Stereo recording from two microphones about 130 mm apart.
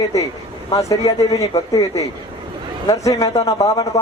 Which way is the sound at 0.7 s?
25° left (ahead or behind).